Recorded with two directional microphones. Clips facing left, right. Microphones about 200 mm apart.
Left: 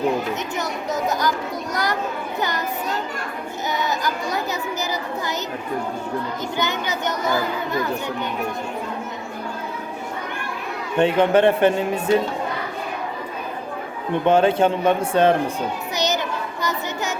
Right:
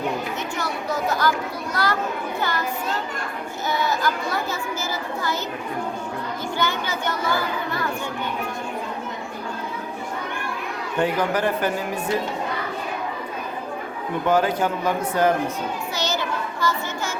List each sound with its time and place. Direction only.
0.5 s a child's voice: 20° left (ahead or behind)
3.7 s a child's voice: 20° left (ahead or behind)
6.6 s a child's voice: 20° left (ahead or behind)
10.9 s a child's voice: 25° left (ahead or behind)
14.3 s a child's voice: 25° left (ahead or behind)
16.0 s children playing: 20° left (ahead or behind)